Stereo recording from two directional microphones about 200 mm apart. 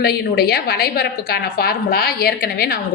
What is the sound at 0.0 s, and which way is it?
A woman's voice, 55° left (ahead or behind).